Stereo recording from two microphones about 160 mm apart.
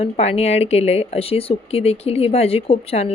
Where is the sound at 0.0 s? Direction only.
40° left (ahead or behind).